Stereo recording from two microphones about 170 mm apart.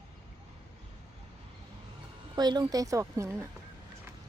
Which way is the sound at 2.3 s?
25° right (ahead or behind).